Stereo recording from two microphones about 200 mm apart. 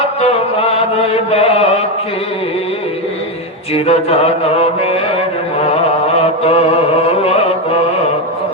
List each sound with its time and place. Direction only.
0.2 s chant: 30° left (ahead or behind)
3.8 s mantra: 30° left (ahead or behind)
5.6 s music: 30° left (ahead or behind)